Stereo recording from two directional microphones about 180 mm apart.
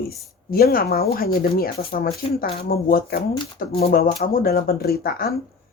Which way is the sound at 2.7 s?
55° left (ahead or behind).